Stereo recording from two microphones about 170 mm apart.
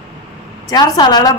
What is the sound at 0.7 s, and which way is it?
Speech, 25° left (ahead or behind).